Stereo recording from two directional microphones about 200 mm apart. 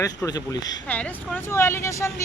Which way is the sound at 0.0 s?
15° left (ahead or behind).